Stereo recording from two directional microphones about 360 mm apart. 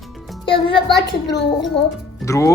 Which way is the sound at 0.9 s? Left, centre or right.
Left.